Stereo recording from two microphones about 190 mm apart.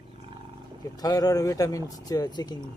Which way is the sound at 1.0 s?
20° left (ahead or behind).